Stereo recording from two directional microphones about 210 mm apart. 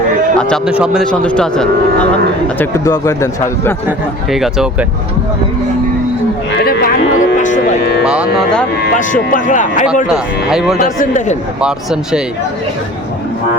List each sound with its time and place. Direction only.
0.3 s a man's voice: centre (ahead or behind)
3.8 s speech: centre (ahead or behind)
6.7 s cattle: 40° left (ahead or behind)
8.0 s speech: 5° right (ahead or behind)
8.8 s speech: 40° left (ahead or behind)
10.1 s speech: centre (ahead or behind)
10.8 s speech: 35° left (ahead or behind)
11.6 s speech: 5° right (ahead or behind)